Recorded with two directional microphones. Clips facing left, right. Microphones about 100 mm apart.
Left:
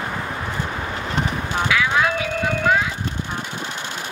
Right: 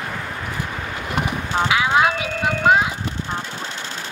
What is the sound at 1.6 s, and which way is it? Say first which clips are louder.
Vehicle: right 2 dB; 20° right (ahead or behind).